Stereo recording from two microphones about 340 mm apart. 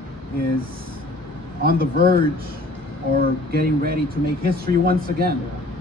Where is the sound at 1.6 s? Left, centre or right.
Right.